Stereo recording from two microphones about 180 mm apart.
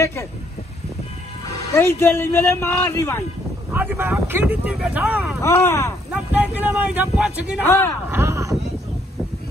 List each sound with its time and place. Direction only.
0.0 s vehicle: 15° left (ahead or behind)
1.4 s speech: 15° left (ahead or behind)
3.7 s speech: 10° right (ahead or behind)
5.4 s speech: 15° left (ahead or behind)
6.1 s speech: 10° right (ahead or behind)